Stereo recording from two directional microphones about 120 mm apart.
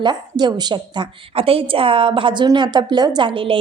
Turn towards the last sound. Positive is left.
turn(degrees=-45)  # may be behind; listen again after turning